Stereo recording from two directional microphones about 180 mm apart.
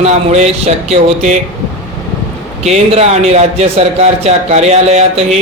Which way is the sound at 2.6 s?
35° right (ahead or behind).